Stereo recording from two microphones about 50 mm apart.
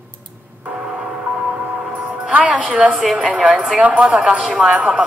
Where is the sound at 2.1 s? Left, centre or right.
Right.